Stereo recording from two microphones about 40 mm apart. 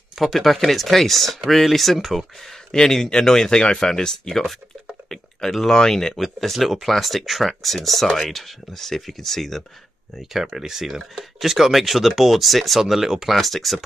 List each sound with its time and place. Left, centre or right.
0.2 s speech: centre
2.7 s speech: centre
5.7 s speech: centre
6.2 s speech: centre
10.1 s speech: centre